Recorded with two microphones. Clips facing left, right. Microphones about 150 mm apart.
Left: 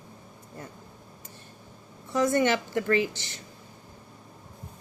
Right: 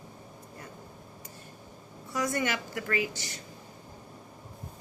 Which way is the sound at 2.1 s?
25° left (ahead or behind).